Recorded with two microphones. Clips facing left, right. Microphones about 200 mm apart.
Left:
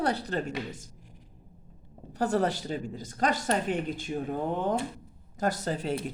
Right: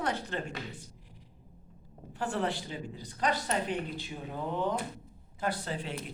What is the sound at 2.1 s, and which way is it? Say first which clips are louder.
Speech: left 6 dB; 40° left (ahead or behind).